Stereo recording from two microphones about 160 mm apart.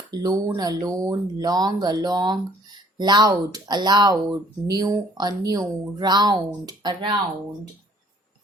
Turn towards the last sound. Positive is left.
turn(degrees=-25)  # may be behind; listen again after turning